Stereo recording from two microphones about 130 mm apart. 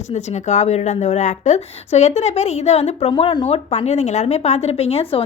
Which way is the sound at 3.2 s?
40° left (ahead or behind).